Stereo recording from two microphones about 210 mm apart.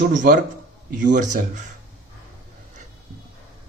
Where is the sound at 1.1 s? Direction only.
35° right (ahead or behind).